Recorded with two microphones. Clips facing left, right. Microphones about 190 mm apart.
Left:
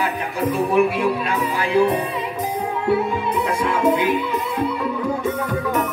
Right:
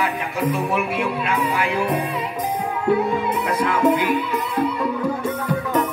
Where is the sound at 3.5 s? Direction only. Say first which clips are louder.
Right 1 dB; 25° left (ahead or behind).